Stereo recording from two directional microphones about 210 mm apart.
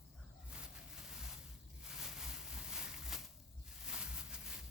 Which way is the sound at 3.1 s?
Centre (ahead or behind).